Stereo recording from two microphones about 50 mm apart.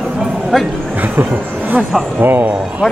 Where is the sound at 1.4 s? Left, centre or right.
Right.